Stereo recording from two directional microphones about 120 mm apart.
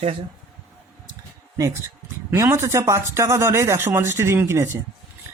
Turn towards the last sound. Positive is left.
turn(degrees=-20)  # may be behind; listen again after turning